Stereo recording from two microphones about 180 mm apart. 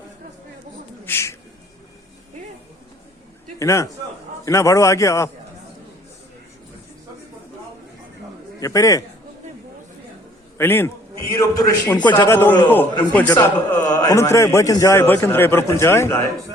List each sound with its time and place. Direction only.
1.0 s speech: 15° left (ahead or behind)
3.6 s a man's voice: 15° left (ahead or behind)
8.6 s a man's voice: 20° left (ahead or behind)
10.6 s a man's voice: 15° left (ahead or behind)